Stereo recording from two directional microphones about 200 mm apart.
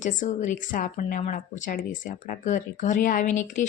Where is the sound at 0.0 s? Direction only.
40° left (ahead or behind).